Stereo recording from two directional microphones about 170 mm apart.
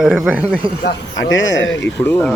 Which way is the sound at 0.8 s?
90° left.